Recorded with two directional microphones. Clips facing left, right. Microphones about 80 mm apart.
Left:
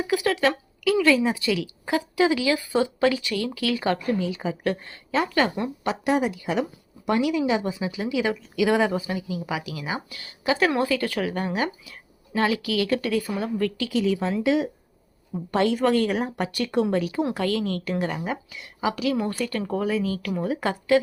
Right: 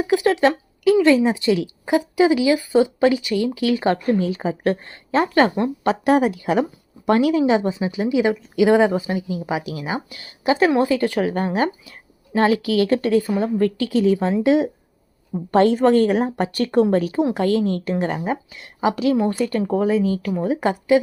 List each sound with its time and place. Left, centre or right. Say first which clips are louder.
0.0 s a woman's voice: right 5 dB; right
1.9 s speech: right 5 dB; centre